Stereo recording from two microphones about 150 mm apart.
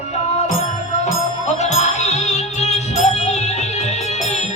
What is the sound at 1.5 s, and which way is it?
Music, 50° left (ahead or behind).